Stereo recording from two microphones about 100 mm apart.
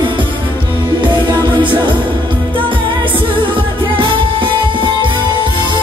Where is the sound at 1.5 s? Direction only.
55° right (ahead or behind).